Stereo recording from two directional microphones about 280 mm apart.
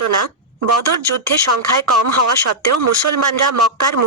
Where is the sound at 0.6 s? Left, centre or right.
Right.